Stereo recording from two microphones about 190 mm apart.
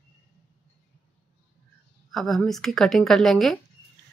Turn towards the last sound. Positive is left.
turn(degrees=0)  # may be behind; listen again after turning